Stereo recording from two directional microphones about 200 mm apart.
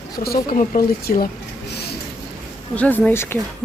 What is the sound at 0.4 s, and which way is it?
Speech, 45° left (ahead or behind).